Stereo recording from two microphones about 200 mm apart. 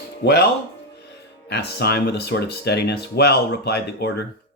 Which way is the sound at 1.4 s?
55° left (ahead or behind).